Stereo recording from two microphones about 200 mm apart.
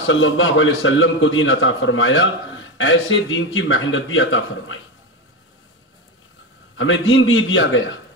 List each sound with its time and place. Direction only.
0.0 s a man's voice: 75° left (ahead or behind)
6.8 s a man's voice: 75° left (ahead or behind)